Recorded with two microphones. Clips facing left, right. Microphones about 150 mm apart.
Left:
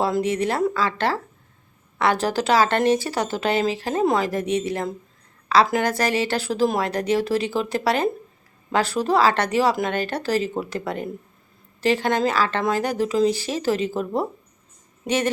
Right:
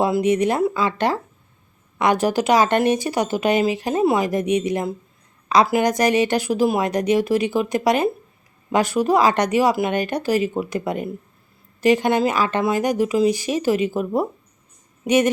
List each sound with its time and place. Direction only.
0.0 s a woman's voice: 15° right (ahead or behind)